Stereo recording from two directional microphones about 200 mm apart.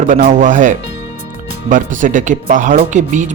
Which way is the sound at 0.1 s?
40° right (ahead or behind).